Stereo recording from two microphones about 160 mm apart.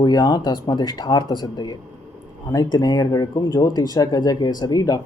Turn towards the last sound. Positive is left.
turn(degrees=25)  # may be behind; listen again after turning